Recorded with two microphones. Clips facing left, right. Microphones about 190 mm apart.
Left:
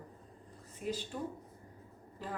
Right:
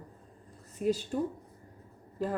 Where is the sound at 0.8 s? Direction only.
40° right (ahead or behind).